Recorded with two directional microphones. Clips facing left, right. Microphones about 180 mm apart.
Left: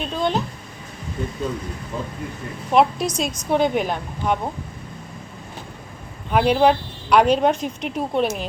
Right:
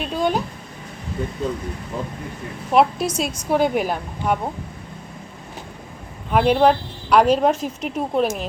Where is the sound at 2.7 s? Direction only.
5° right (ahead or behind).